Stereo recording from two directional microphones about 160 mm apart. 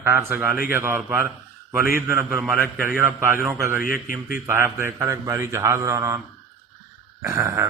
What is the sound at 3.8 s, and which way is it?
Speech, 60° left (ahead or behind).